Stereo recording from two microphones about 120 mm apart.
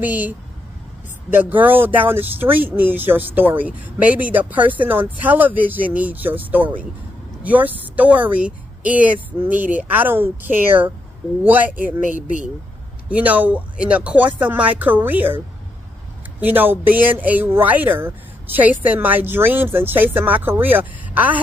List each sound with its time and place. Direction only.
0.0 s speech: 15° right (ahead or behind)
1.3 s speech: 15° right (ahead or behind)
12.1 s speech: 90° left
13.1 s speech: 15° right (ahead or behind)